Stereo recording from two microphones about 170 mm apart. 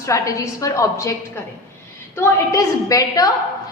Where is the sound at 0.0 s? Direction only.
20° left (ahead or behind).